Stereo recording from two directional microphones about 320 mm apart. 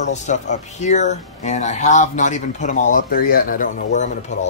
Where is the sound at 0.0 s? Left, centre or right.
Left.